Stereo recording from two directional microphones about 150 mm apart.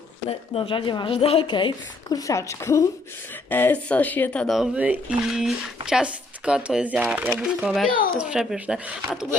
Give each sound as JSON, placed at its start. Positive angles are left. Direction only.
{"t": 0.3, "sound": "a woman's voice", "side_deg": 40}